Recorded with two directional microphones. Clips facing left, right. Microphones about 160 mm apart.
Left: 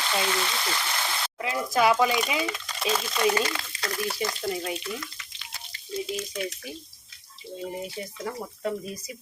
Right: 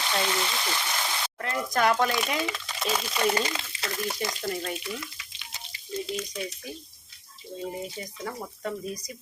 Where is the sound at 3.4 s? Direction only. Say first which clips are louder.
Left 1 dB; 25° right (ahead or behind).